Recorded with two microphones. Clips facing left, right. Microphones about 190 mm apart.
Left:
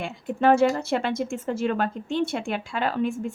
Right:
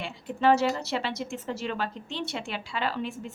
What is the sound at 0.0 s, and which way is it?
Speech, 50° left (ahead or behind).